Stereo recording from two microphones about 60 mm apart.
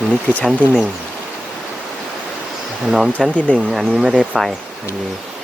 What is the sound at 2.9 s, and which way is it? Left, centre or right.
Speech, centre.